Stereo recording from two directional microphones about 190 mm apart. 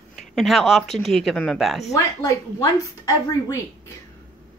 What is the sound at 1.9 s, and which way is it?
A woman's voice, 15° left (ahead or behind).